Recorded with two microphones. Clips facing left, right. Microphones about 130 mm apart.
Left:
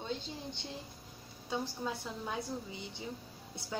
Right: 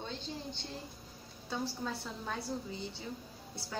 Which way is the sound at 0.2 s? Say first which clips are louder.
Right 1 dB; 50° left (ahead or behind).